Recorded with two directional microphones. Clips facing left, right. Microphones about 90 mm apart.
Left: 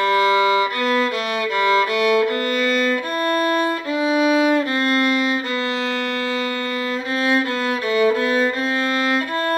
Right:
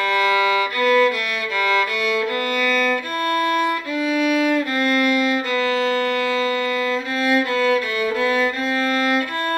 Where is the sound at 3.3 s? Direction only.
25° left (ahead or behind).